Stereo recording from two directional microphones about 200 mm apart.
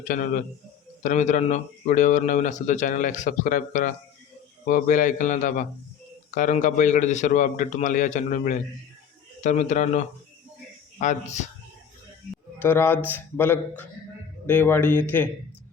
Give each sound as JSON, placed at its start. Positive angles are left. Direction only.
{"t": 0.0, "sound": "speech", "side_deg": 40}
{"t": 12.5, "sound": "a man's voice", "side_deg": 10}